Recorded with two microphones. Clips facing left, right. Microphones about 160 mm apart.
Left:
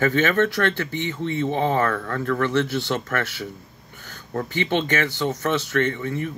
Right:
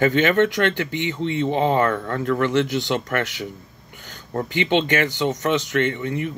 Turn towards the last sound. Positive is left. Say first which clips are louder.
# right 1 dB
turn(degrees=-20)  # may be behind; listen again after turning